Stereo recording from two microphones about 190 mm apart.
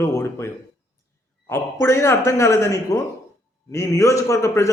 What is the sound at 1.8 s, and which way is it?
A man's voice, 15° left (ahead or behind).